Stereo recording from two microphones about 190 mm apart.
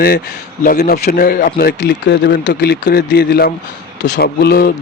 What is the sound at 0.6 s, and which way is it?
Speech, 55° left (ahead or behind).